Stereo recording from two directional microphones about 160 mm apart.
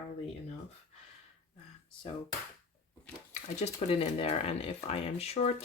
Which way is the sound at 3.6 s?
40° left (ahead or behind).